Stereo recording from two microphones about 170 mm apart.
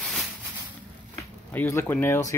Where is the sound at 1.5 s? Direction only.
15° left (ahead or behind).